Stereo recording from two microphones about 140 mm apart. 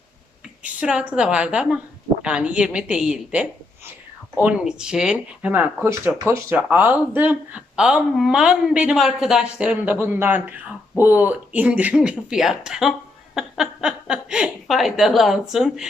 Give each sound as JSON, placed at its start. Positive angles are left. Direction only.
{"t": 0.6, "sound": "a woman's voice", "side_deg": -10}